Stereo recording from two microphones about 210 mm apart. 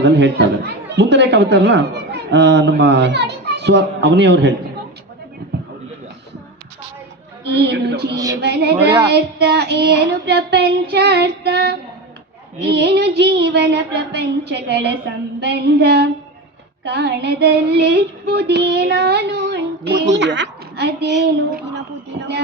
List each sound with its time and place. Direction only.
0.0 s speech: 55° right (ahead or behind)
7.4 s female singing: 55° right (ahead or behind)
8.1 s a woman's voice: 15° right (ahead or behind)
8.4 s female singing: 50° right (ahead or behind)
21.5 s speech: 55° right (ahead or behind)